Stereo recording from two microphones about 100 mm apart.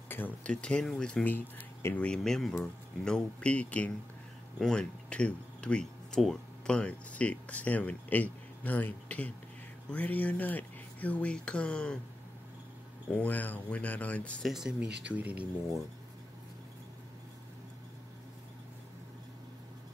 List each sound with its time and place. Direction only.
0.1 s speech: 15° left (ahead or behind)
1.2 s speech: 20° left (ahead or behind)
2.0 s speech: 5° left (ahead or behind)
13.1 s speech: 15° left (ahead or behind)
14.4 s speech: 5° right (ahead or behind)